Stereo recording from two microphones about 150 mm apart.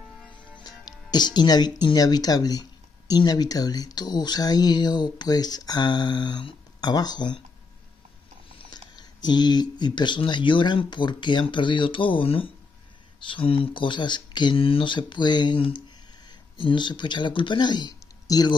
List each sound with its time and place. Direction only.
0.6 s speech: 25° left (ahead or behind)
8.5 s speech: 30° left (ahead or behind)